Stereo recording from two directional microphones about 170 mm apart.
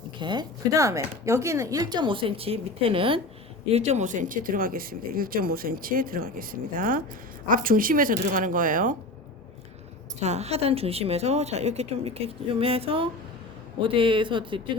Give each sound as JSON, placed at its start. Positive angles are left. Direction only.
{"t": 0.2, "sound": "speech", "side_deg": -25}
{"t": 10.2, "sound": "a woman's voice", "side_deg": -40}